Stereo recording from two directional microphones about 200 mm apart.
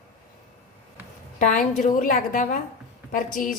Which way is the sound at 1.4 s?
40° left (ahead or behind).